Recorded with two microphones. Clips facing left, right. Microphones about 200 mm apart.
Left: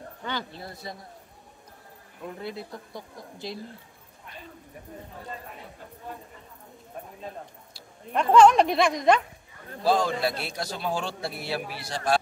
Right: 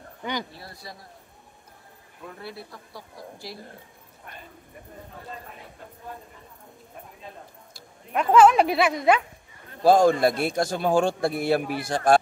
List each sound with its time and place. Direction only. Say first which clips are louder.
0.2 s speech: right 3 dB; 15° right (ahead or behind)
0.6 s a woman's voice: left 4 dB; 20° left (ahead or behind)
2.4 s a woman's voice: left 3 dB; 20° left (ahead or behind)
8.1 s speech: even; 5° right (ahead or behind)
9.8 s a man's voice: right 7 dB; 50° right (ahead or behind)